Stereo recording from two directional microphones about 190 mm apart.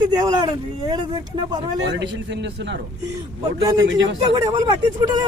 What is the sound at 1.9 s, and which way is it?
Speech, 70° right (ahead or behind).